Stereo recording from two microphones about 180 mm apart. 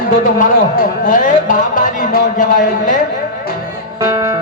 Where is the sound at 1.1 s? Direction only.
45° left (ahead or behind).